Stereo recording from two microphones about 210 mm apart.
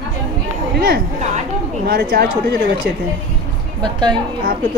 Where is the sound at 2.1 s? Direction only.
45° right (ahead or behind).